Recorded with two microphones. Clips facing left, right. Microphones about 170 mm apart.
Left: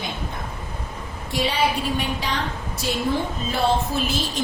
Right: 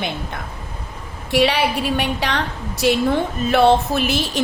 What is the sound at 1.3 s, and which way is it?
A woman's voice, 75° right (ahead or behind).